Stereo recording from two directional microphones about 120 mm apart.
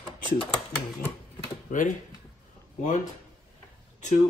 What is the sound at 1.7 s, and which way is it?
Speech, 90° left.